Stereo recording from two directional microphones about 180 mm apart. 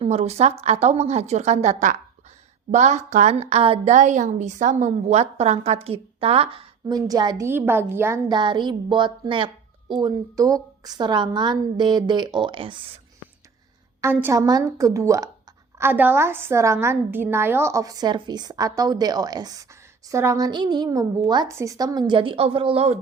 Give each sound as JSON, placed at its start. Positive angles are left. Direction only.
{"t": 0.0, "sound": "a woman's voice", "side_deg": -35}
{"t": 8.3, "sound": "a woman's voice", "side_deg": -25}
{"t": 14.0, "sound": "a woman's voice", "side_deg": -10}